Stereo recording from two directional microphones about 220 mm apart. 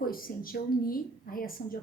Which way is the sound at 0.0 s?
40° left (ahead or behind).